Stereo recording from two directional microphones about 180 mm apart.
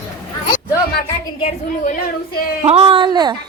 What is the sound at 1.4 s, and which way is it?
A woman's voice, 40° left (ahead or behind).